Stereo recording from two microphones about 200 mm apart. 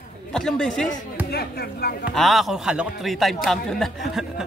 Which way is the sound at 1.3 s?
50° left (ahead or behind).